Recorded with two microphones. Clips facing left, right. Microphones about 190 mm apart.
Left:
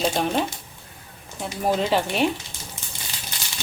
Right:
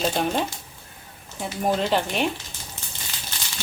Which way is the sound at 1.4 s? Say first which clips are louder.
Left 1 dB; centre (ahead or behind).